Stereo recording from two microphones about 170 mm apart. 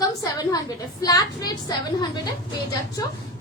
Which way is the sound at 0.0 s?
20° left (ahead or behind).